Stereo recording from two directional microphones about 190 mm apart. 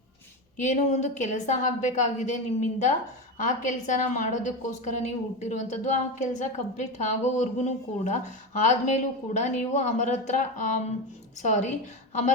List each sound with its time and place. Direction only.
0.5 s a woman's voice: 40° left (ahead or behind)